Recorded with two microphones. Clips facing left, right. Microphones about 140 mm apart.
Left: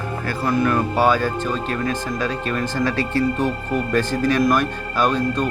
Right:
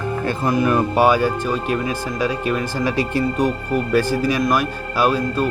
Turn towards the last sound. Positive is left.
turn(degrees=-5)  # may be behind; listen again after turning